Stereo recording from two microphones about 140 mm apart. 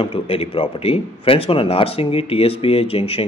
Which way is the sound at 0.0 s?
45° left (ahead or behind).